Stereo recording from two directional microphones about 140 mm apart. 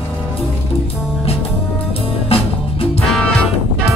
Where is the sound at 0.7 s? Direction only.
45° left (ahead or behind).